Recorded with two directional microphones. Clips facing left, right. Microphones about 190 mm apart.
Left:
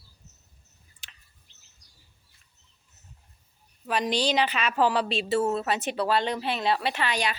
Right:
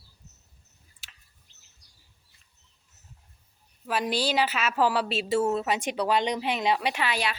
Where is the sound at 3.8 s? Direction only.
5° right (ahead or behind).